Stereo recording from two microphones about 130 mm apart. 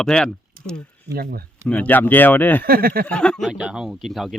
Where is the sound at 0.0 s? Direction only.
5° left (ahead or behind).